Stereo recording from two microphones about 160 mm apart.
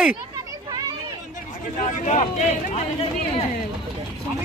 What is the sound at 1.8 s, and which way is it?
Speech, 45° left (ahead or behind).